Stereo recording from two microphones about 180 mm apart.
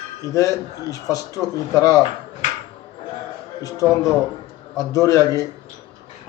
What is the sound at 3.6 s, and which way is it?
A man's voice, 20° left (ahead or behind).